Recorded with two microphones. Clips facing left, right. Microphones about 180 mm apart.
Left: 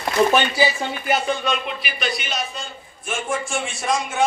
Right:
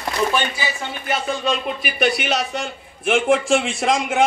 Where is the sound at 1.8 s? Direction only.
65° right (ahead or behind).